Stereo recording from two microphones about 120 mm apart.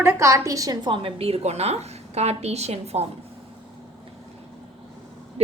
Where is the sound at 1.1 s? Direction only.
55° right (ahead or behind).